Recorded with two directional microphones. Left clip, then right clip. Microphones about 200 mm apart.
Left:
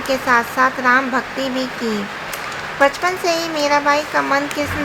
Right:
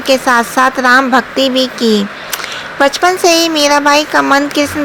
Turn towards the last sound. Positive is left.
turn(degrees=-40)  # may be behind; listen again after turning